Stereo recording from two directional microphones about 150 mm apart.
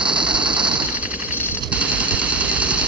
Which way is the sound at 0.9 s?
10° right (ahead or behind).